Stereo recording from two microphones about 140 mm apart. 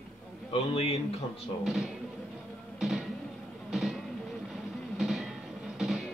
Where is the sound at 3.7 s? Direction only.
Centre (ahead or behind).